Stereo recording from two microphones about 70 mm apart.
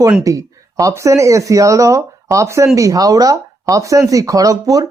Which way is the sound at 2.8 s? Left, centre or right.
Right.